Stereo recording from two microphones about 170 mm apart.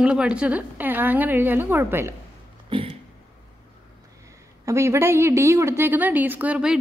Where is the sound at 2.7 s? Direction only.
30° right (ahead or behind).